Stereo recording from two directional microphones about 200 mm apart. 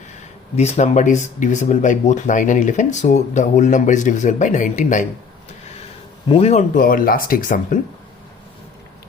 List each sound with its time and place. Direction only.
0.5 s speech: 35° left (ahead or behind)
6.2 s speech: 30° left (ahead or behind)